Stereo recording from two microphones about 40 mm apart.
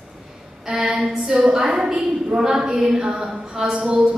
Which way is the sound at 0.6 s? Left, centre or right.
Centre.